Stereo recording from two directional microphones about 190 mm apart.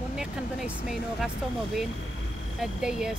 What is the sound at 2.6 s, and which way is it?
Speech, 5° right (ahead or behind).